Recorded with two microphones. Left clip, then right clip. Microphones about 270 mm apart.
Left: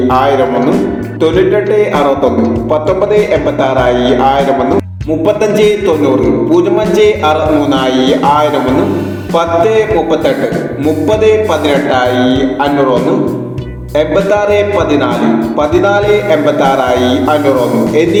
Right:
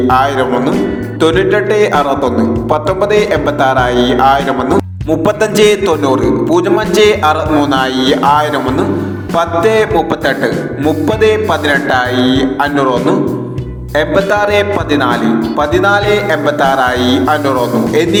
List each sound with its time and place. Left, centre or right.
0.1 s music: right
5.6 s music: right
11.1 s music: right
14.3 s music: right
15.7 s music: right
16.9 s speech: right
17.2 s music: right